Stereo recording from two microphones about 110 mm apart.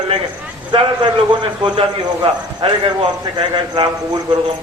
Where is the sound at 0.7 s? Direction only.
45° right (ahead or behind).